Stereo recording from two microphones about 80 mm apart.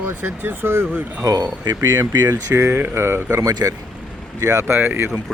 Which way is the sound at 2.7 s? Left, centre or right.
Right.